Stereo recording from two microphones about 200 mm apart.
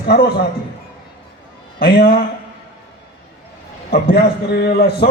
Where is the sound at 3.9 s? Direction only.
50° left (ahead or behind).